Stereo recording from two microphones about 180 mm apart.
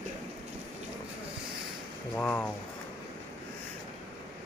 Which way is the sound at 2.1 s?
10° left (ahead or behind).